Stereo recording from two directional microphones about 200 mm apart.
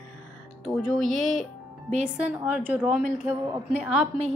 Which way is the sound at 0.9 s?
Centre (ahead or behind).